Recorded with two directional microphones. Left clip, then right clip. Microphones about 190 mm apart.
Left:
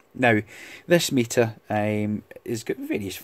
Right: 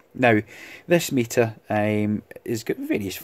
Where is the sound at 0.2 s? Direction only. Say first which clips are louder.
Right 2 dB; centre (ahead or behind).